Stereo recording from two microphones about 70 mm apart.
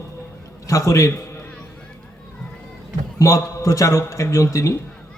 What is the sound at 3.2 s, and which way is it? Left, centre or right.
A man's voice, left.